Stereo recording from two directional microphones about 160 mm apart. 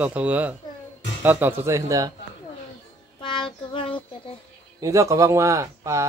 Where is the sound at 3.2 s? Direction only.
30° left (ahead or behind).